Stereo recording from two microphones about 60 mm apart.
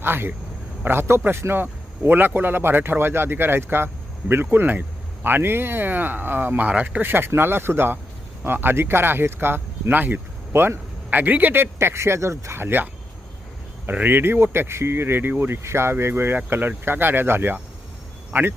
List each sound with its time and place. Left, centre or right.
0.0 s speech: right
1.6 s speech: right
13.9 s speech: right